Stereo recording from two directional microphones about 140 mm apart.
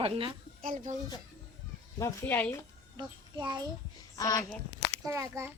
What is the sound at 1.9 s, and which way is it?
Speech, 20° left (ahead or behind).